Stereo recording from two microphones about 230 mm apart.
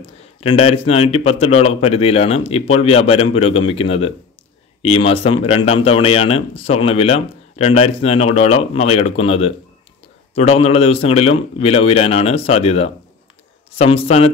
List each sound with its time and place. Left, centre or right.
0.0 s speech: left